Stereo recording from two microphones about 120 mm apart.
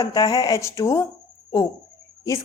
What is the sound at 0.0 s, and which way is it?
A woman's voice, 30° left (ahead or behind).